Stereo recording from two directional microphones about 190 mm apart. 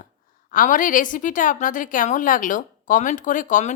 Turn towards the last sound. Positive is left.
turn(degrees=40)  # may be behind; listen again after turning